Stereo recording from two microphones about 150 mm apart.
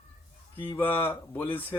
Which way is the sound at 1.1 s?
15° left (ahead or behind).